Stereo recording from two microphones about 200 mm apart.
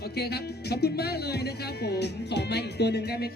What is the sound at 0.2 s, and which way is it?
Speech, 55° left (ahead or behind).